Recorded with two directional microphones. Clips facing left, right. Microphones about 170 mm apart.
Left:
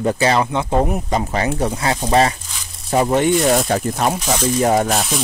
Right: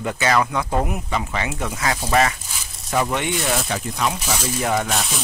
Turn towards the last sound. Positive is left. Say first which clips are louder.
# left 6 dB
turn(degrees=40)  # may be behind; listen again after turning